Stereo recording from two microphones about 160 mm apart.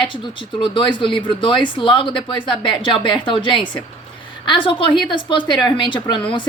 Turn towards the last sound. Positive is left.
turn(degrees=30)  # may be behind; listen again after turning